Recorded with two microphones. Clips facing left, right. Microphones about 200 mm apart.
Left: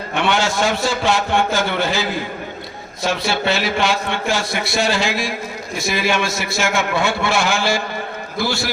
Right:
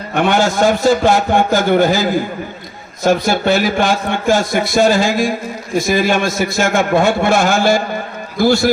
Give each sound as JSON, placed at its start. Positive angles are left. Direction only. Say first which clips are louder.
{"t": 0.2, "sound": "a man's voice", "louder": "right 6 dB", "side_deg": -50}